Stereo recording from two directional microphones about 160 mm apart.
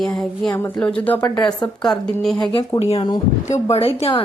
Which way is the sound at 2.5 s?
30° left (ahead or behind).